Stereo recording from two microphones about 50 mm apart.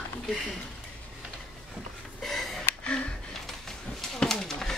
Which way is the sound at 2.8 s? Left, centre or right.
Left.